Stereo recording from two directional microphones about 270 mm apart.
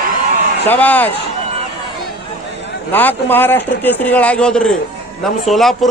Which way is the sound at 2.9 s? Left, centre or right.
Centre.